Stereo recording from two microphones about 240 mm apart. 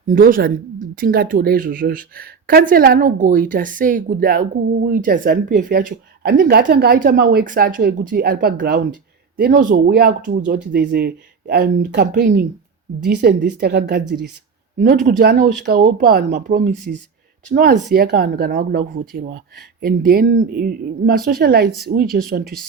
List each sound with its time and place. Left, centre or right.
0.1 s a woman's voice: right
15.2 s speech: right